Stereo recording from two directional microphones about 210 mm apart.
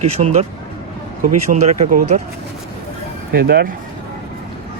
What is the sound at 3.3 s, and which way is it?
Speech, 50° right (ahead or behind).